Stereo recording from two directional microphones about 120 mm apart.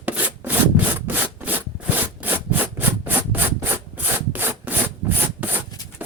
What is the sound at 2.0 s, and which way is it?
Rub, 15° right (ahead or behind).